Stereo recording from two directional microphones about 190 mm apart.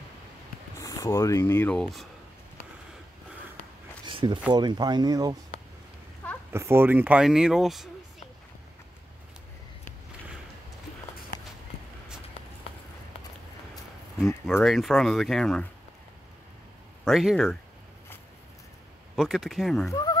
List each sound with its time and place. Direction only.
0.7 s speech: 15° left (ahead or behind)
4.0 s a sound: 25° right (ahead or behind)
4.5 s speech: 20° right (ahead or behind)
6.5 s speech: 15° right (ahead or behind)
14.2 s speech: centre (ahead or behind)
17.0 s speech: centre (ahead or behind)
19.1 s speech: centre (ahead or behind)
19.9 s speech: 20° left (ahead or behind)